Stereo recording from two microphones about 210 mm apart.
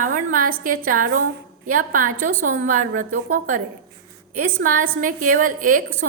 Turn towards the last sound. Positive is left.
turn(degrees=-40)  # may be behind; listen again after turning